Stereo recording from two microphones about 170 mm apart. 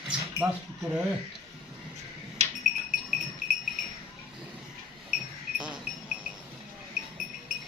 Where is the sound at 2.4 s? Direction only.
40° right (ahead or behind).